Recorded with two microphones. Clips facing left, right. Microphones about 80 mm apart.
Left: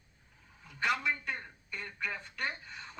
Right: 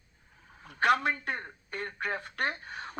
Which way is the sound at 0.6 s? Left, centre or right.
Right.